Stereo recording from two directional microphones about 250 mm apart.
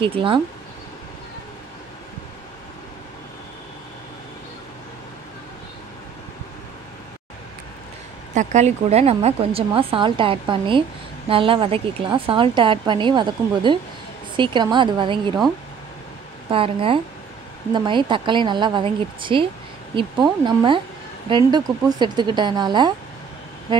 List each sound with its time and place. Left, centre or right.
0.0 s a woman's voice: right
8.4 s a woman's voice: right
16.4 s a woman's voice: right